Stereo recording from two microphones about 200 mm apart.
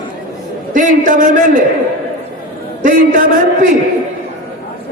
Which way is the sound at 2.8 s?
40° right (ahead or behind).